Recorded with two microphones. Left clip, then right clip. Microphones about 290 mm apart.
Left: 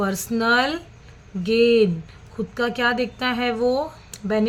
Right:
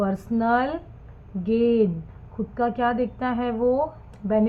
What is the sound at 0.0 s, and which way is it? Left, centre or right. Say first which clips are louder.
A woman's voice: left 2 dB; left.